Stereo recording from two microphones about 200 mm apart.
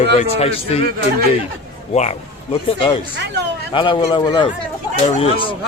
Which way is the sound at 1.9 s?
35° left (ahead or behind).